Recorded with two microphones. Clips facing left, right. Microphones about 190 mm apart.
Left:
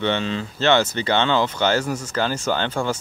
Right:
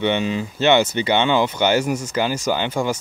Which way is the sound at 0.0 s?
15° right (ahead or behind).